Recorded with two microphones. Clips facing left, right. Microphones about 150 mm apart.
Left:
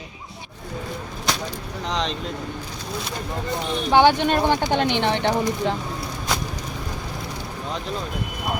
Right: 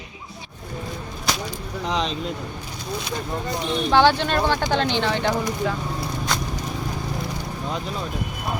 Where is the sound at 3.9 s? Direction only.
15° left (ahead or behind).